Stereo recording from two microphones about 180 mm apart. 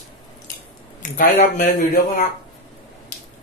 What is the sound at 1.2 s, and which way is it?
Speech, 50° left (ahead or behind).